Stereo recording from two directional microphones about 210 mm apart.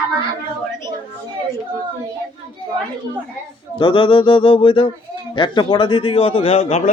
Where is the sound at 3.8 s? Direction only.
25° left (ahead or behind).